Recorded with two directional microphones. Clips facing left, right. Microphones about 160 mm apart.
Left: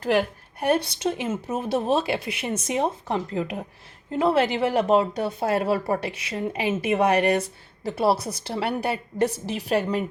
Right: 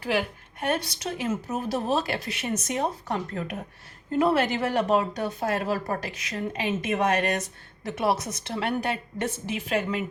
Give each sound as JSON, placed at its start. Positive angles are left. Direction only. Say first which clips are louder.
{"t": 0.7, "sound": "a woman's voice", "louder": "left 6 dB", "side_deg": 30}